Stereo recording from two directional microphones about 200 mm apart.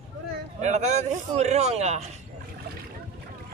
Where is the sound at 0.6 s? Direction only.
35° right (ahead or behind).